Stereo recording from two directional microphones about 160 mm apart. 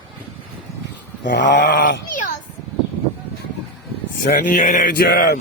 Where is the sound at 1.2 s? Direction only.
90° left.